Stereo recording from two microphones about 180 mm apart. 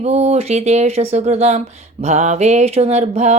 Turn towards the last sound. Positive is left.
turn(degrees=-40)  # may be behind; listen again after turning